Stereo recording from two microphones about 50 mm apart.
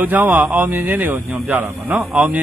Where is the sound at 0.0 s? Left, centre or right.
Right.